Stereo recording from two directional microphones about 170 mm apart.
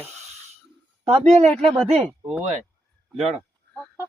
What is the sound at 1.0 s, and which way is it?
Speech, 40° right (ahead or behind).